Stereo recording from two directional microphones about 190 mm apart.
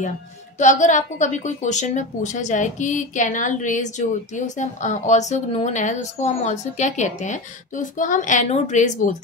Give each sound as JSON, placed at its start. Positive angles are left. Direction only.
{"t": 0.6, "sound": "a woman's voice", "side_deg": 40}